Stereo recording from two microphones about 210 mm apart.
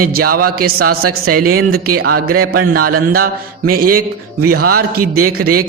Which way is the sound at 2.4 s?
90° right.